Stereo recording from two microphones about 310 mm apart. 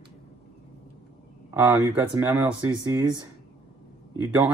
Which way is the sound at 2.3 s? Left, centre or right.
Centre.